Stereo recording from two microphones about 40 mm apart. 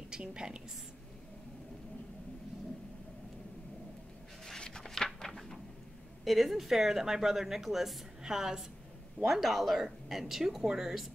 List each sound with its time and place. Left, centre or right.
0.2 s a woman's voice: right
4.6 s a sound: centre
6.2 s a woman's voice: centre